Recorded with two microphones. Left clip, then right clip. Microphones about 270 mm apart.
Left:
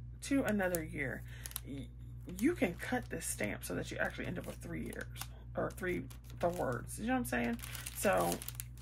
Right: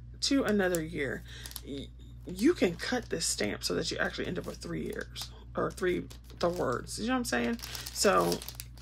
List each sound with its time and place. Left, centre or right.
0.2 s speech: centre